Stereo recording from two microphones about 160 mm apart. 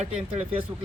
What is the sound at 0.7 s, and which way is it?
Speech, 25° right (ahead or behind).